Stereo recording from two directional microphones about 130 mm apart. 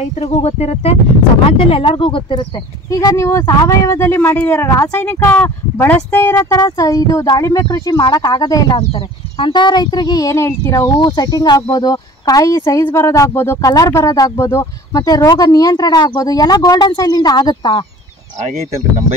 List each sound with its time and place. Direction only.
0.0 s speech: 55° left (ahead or behind); by 2.4 s 40° left (ahead or behind)
2.9 s speech: 25° left (ahead or behind)
11.0 s speech: 30° left (ahead or behind)